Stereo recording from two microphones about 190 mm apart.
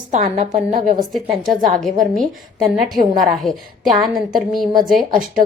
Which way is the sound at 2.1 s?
Centre (ahead or behind).